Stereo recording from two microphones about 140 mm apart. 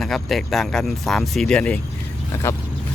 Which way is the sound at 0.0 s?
Centre (ahead or behind).